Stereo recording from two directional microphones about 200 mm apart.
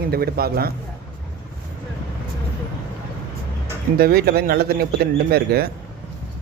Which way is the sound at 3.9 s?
50° right (ahead or behind).